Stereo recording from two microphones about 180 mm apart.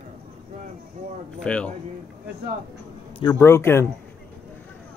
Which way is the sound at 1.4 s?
5° left (ahead or behind).